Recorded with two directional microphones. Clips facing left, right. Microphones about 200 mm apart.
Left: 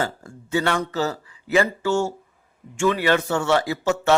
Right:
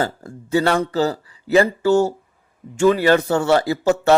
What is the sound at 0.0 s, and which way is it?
A man's voice, 35° right (ahead or behind).